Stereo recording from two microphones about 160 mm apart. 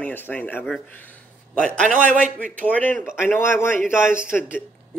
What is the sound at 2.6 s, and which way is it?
Speech, 10° left (ahead or behind).